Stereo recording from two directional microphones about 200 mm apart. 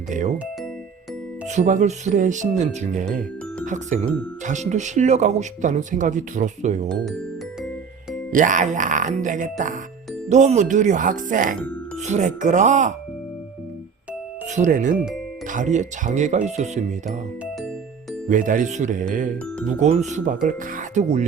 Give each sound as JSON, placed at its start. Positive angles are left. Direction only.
{"t": 0.1, "sound": "speech", "side_deg": -40}
{"t": 1.5, "sound": "speech", "side_deg": -35}
{"t": 3.6, "sound": "speech", "side_deg": -40}
{"t": 6.8, "sound": "speech", "side_deg": 0}
{"t": 8.3, "sound": "speech", "side_deg": -40}
{"t": 14.5, "sound": "speech", "side_deg": -40}
{"t": 17.1, "sound": "speech", "side_deg": 0}
{"t": 18.3, "sound": "speech", "side_deg": -40}